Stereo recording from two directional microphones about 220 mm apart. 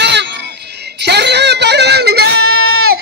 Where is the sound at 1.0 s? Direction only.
50° right (ahead or behind).